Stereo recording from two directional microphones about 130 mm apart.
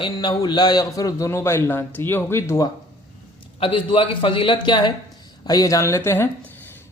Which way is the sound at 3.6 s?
45° left (ahead or behind).